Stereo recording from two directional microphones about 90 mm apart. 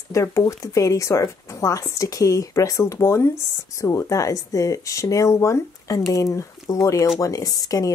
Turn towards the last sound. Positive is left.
turn(degrees=45)  # may be behind; listen again after turning